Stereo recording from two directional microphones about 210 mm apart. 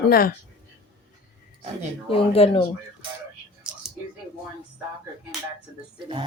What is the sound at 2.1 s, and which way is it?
Speech, 25° left (ahead or behind).